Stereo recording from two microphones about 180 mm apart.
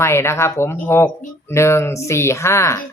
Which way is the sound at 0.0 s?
15° left (ahead or behind).